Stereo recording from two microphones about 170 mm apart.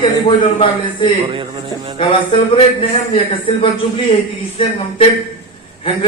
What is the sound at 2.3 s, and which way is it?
Speech, 30° left (ahead or behind).